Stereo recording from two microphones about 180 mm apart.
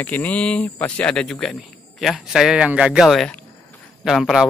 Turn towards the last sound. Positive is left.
turn(degrees=0)  # may be behind; listen again after turning